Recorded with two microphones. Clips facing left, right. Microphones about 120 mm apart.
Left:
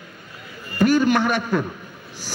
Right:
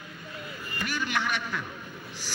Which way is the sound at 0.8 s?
45° left (ahead or behind).